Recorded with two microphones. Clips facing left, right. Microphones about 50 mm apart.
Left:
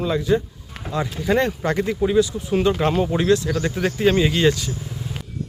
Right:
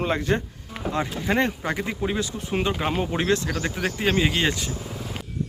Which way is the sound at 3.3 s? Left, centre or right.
Right.